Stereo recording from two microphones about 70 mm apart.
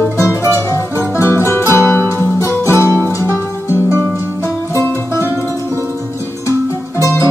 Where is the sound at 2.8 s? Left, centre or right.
Right.